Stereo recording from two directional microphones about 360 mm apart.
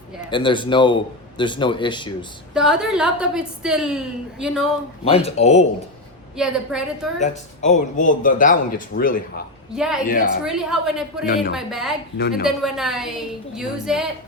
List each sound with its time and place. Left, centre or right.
0.3 s speech: centre
2.6 s a woman's voice: centre
5.0 s speech: centre
6.3 s a woman's voice: centre
7.2 s speech: centre
9.7 s a woman's voice: centre
10.1 s speech: left
10.4 s a woman's voice: centre